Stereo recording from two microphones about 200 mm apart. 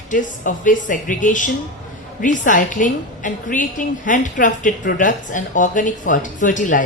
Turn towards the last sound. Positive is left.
turn(degrees=40)  # may be behind; listen again after turning